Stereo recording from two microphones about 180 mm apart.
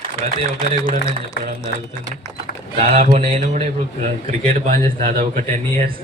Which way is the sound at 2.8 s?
35° right (ahead or behind).